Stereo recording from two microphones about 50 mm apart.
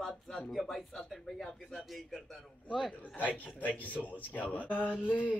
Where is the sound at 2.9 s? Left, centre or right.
Left.